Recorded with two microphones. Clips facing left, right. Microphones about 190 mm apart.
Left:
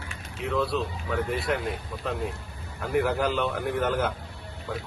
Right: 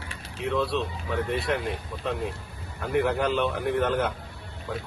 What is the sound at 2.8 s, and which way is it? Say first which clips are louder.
Speech: even; centre (ahead or behind).